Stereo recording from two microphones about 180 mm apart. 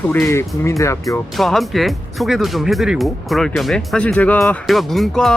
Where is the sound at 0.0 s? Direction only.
10° left (ahead or behind).